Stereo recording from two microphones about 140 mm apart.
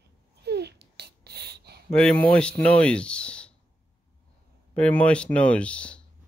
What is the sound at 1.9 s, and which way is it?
Speech, 10° left (ahead or behind).